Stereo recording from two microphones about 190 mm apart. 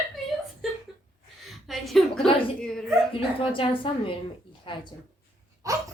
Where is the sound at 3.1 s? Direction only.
25° left (ahead or behind).